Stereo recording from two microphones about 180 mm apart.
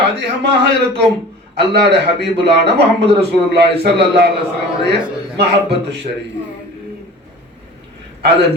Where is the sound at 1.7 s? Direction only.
70° right (ahead or behind).